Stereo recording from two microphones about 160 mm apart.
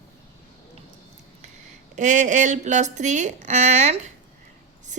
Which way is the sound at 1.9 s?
50° right (ahead or behind).